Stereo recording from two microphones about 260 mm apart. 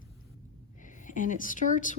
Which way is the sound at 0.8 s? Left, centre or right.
Left.